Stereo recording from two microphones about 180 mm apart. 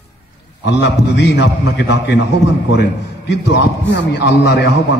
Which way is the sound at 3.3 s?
80° left.